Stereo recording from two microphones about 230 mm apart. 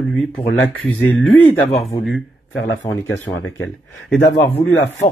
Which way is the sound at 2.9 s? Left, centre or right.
Centre.